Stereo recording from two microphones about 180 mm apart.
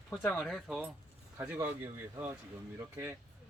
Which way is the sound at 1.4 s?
10° right (ahead or behind).